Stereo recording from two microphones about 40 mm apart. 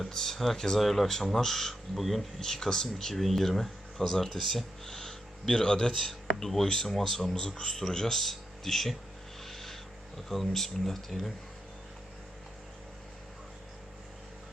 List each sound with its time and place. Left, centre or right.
0.0 s speech: centre
6.0 s speech: centre
9.4 s a sound: centre
10.2 s speech: centre